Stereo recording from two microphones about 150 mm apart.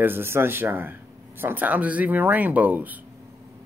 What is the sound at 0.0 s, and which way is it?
Speech, 15° right (ahead or behind).